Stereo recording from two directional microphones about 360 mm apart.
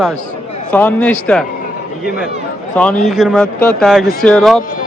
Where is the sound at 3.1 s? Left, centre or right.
Centre.